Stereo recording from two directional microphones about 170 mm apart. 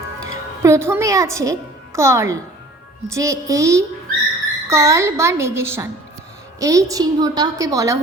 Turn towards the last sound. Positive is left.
turn(degrees=-20)  # may be behind; listen again after turning